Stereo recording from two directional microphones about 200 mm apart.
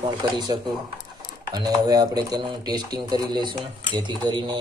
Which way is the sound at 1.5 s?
20° right (ahead or behind).